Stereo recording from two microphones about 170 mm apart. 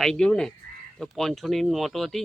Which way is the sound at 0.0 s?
5° left (ahead or behind).